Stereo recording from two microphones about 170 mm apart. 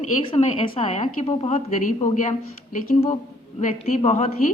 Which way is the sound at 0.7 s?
30° left (ahead or behind).